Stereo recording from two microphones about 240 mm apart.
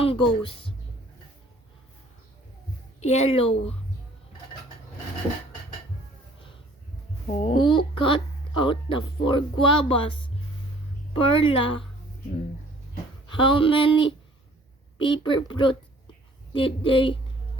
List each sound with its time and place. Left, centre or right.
0.0 s speech: left
3.0 s speech: left
7.3 s speech: left
13.4 s speech: left